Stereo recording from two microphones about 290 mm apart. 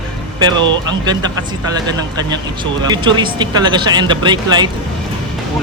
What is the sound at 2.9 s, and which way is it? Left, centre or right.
Speech, centre.